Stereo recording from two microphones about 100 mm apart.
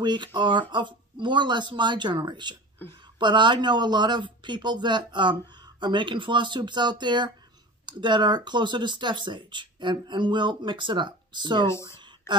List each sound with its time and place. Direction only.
0.0 s speech: 50° right (ahead or behind)
2.8 s speech: 20° left (ahead or behind)
3.2 s speech: 50° right (ahead or behind)
11.6 s speech: 30° left (ahead or behind)